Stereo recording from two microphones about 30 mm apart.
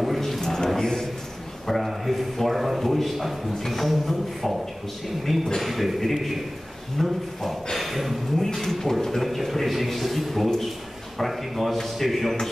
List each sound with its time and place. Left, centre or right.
0.2 s a sound: centre
1.7 s a man's voice: centre
7.0 s speech: centre
7.7 s speech: centre